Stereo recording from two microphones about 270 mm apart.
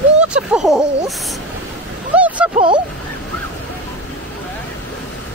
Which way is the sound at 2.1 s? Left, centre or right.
Centre.